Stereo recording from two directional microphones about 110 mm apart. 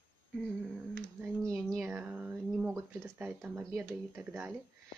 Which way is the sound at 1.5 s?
Centre (ahead or behind).